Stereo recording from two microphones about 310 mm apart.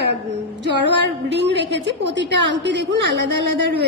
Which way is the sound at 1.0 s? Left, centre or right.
Right.